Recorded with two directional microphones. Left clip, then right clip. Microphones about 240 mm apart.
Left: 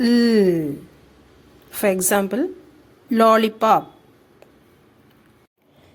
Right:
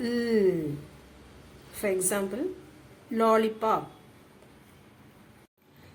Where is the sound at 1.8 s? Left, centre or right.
Left.